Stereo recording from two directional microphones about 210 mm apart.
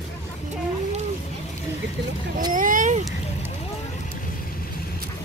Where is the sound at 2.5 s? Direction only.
40° right (ahead or behind).